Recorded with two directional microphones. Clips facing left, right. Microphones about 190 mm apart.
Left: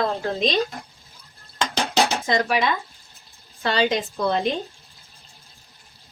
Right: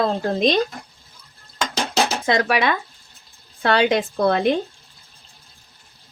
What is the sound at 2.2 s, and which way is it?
A woman's voice, 65° right (ahead or behind).